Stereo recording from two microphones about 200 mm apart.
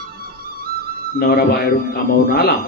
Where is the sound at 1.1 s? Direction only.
50° left (ahead or behind).